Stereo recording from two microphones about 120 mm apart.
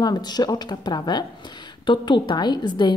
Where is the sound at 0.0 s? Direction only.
35° left (ahead or behind).